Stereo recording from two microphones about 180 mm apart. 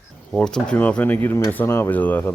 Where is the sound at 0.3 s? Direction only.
5° left (ahead or behind).